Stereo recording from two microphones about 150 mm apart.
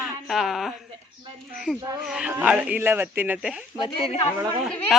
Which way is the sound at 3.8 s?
35° left (ahead or behind).